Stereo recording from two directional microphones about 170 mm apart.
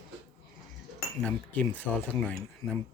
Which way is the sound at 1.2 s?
5° left (ahead or behind).